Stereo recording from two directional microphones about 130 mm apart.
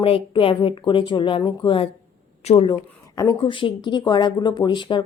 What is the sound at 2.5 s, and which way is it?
Speech, 55° left (ahead or behind).